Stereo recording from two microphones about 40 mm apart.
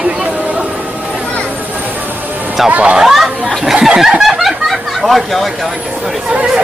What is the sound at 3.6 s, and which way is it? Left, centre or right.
Chicken, centre.